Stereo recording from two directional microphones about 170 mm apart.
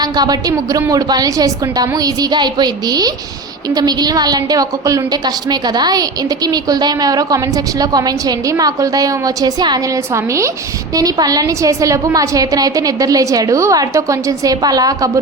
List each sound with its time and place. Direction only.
0.0 s a woman's voice: 25° right (ahead or behind)